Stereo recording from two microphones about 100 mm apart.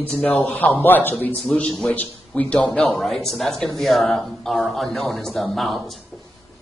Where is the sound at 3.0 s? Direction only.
Centre (ahead or behind).